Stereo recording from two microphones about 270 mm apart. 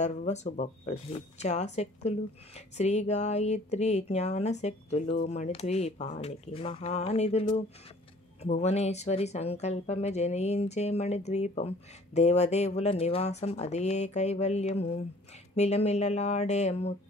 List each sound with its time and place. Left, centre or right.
0.0 s speech: left